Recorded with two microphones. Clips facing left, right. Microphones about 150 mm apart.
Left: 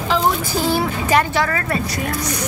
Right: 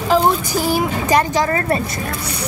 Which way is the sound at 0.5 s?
10° right (ahead or behind).